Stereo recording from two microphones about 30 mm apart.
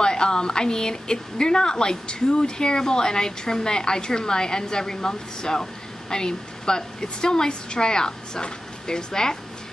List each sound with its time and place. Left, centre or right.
0.0 s a woman's voice: left